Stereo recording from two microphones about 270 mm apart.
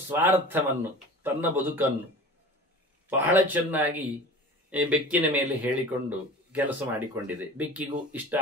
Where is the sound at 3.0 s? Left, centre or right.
Centre.